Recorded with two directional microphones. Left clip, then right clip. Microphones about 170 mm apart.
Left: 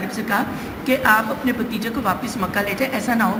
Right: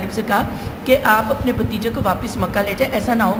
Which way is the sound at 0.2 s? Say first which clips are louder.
Right 4 dB; 40° right (ahead or behind).